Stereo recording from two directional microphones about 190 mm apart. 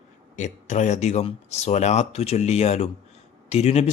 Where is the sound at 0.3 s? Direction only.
40° left (ahead or behind).